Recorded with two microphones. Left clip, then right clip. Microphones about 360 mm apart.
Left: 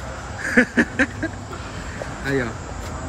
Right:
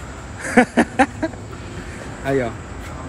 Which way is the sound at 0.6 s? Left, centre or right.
Centre.